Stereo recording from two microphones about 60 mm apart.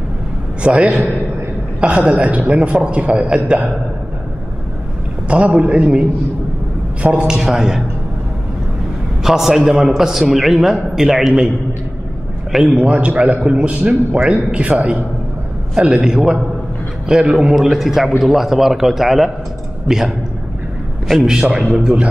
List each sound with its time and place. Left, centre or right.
0.6 s a man's voice: centre
5.3 s a man's voice: centre
9.2 s a man's voice: centre
12.7 s a man's voice: centre
16.0 s a man's voice: centre
21.3 s a man's voice: centre